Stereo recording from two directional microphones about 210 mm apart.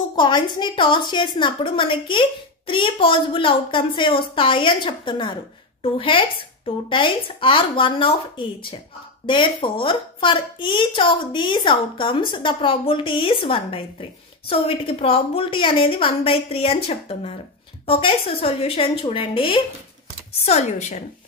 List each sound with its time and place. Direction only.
0.1 s a woman's voice: 20° left (ahead or behind)